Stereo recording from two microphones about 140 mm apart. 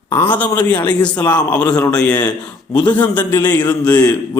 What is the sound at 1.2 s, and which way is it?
Speech, 30° left (ahead or behind).